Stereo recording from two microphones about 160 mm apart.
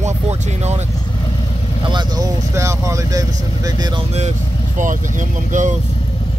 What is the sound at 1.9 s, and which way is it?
Speech, 20° right (ahead or behind).